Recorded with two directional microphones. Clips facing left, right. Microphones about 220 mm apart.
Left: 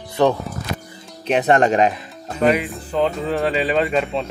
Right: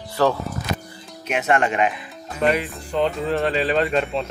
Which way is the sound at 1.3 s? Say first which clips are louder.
Left 5 dB; 35° left (ahead or behind).